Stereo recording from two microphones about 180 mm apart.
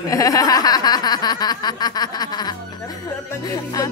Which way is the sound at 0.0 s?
20° left (ahead or behind).